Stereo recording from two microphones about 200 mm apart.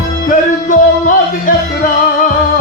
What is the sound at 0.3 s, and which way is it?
Music, 40° left (ahead or behind).